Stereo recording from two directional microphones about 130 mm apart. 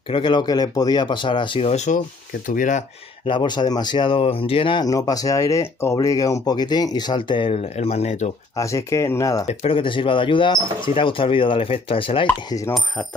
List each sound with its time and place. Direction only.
0.1 s speech: 40° left (ahead or behind)
1.7 s speech: 60° left (ahead or behind)
2.4 s speech: 90° left
3.3 s speech: 35° left (ahead or behind)
4.8 s speech: 30° left (ahead or behind); by 8.3 s 55° left (ahead or behind)
8.5 s speech: 25° left (ahead or behind)
9.5 s speech: 50° left (ahead or behind)
12.4 s speech: 25° left (ahead or behind)